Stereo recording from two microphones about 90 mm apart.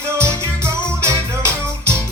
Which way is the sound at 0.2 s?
30° right (ahead or behind).